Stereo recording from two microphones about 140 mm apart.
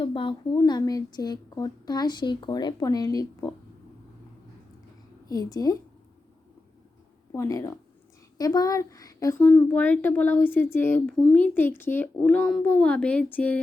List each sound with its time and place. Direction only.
0.0 s a sound: 40° left (ahead or behind)
0.5 s a woman's voice: 25° left (ahead or behind)
5.3 s a woman's voice: 25° left (ahead or behind)
7.3 s a woman's voice: 20° left (ahead or behind)
9.6 s speech: 10° left (ahead or behind)